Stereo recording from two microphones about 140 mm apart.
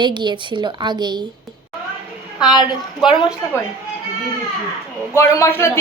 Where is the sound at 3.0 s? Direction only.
35° left (ahead or behind).